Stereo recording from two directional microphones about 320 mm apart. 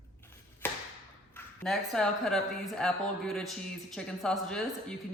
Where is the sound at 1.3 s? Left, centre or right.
Centre.